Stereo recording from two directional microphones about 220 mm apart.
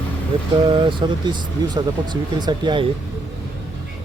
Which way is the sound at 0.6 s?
20° right (ahead or behind).